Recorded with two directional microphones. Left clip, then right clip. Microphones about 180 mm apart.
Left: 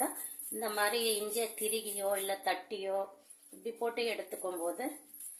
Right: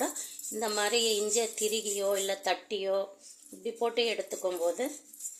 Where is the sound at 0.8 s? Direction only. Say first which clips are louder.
Right 4 dB; 50° right (ahead or behind).